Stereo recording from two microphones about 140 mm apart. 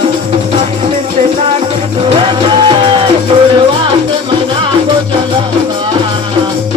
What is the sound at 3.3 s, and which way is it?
Music, 45° right (ahead or behind).